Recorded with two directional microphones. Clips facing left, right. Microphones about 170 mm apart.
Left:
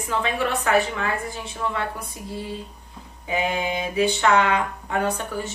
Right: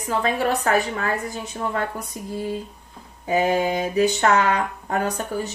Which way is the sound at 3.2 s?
40° right (ahead or behind).